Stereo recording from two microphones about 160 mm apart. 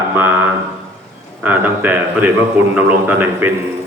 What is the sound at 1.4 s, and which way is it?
Speech, 10° right (ahead or behind).